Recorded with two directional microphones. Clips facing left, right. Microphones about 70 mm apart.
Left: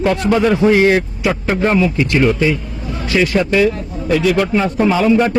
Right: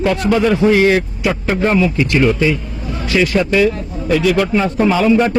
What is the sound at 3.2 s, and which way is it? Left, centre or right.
Speech, left.